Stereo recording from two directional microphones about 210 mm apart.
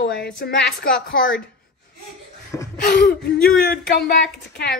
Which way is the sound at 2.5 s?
10° left (ahead or behind).